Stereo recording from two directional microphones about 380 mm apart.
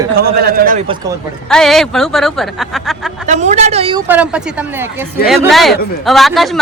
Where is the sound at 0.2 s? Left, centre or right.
Right.